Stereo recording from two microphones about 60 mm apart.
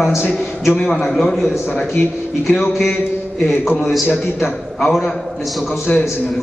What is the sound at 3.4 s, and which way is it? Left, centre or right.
A man's voice, centre.